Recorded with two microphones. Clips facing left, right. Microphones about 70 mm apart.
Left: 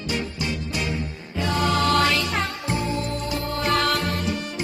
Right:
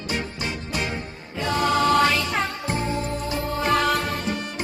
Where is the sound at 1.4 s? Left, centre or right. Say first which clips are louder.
Right 1 dB; centre.